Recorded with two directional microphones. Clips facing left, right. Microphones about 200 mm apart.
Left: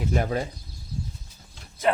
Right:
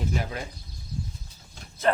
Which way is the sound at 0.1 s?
45° left (ahead or behind).